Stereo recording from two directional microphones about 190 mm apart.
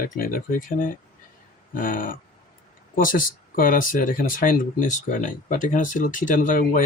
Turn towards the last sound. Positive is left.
turn(degrees=45)  # may be behind; listen again after turning